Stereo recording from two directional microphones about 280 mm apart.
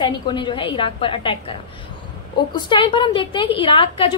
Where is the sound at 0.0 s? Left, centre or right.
Centre.